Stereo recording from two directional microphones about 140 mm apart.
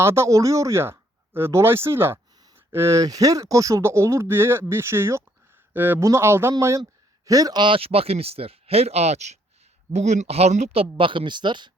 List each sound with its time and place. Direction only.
0.0 s speech: 20° right (ahead or behind); by 10.8 s 50° right (ahead or behind)
10.9 s speech: 40° right (ahead or behind)